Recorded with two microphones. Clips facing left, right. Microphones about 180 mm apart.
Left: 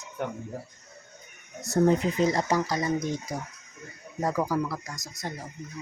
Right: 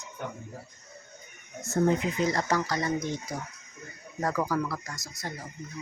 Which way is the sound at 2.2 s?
20° left (ahead or behind).